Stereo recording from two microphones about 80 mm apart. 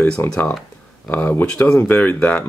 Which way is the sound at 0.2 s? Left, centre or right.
Left.